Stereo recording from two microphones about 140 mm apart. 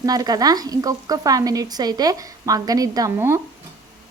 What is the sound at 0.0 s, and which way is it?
A woman's voice, 25° right (ahead or behind).